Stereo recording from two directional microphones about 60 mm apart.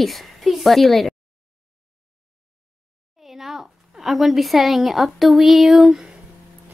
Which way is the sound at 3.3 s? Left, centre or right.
Centre.